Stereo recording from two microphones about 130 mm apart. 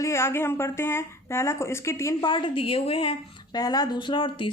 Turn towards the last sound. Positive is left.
turn(degrees=40)  # may be behind; listen again after turning